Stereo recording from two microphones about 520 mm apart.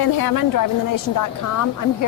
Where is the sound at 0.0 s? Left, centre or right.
Left.